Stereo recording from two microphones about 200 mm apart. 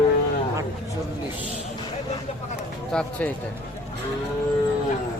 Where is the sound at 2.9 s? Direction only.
5° left (ahead or behind).